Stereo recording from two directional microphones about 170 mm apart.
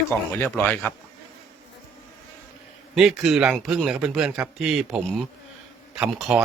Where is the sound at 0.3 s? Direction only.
10° left (ahead or behind).